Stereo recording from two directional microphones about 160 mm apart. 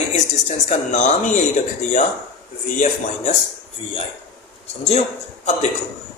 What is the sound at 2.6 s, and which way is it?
Speech, 50° left (ahead or behind).